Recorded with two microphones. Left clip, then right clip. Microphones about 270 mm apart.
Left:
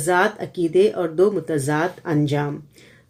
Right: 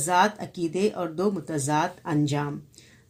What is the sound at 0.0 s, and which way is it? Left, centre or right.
Speech, right.